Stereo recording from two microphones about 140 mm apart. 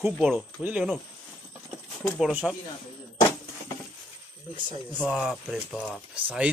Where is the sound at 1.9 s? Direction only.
5° left (ahead or behind).